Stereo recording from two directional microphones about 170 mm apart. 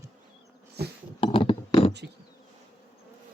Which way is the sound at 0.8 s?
70° right (ahead or behind).